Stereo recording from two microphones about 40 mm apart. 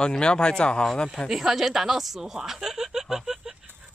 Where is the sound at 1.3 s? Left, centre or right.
Centre.